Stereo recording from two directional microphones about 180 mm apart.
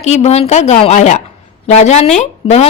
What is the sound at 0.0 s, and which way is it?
A woman's voice, 35° left (ahead or behind).